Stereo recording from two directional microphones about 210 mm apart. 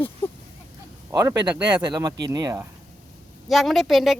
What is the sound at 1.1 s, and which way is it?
Speech, 15° right (ahead or behind).